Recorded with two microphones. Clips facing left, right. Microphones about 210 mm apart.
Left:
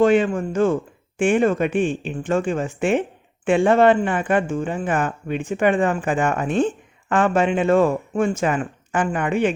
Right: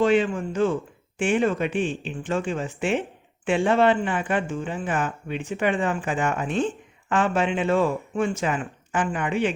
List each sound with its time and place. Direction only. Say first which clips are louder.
0.0 s speech: left 4 dB; 50° left (ahead or behind)